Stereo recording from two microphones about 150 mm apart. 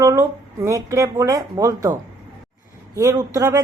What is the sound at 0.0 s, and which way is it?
Speech, 20° right (ahead or behind).